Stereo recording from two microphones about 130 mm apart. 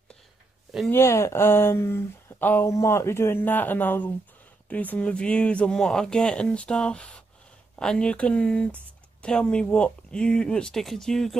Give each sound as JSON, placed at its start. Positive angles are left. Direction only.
{"t": 0.8, "sound": "speech", "side_deg": 20}